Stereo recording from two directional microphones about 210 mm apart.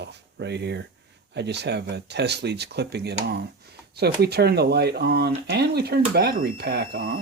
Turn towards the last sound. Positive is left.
turn(degrees=-45)  # may be behind; listen again after turning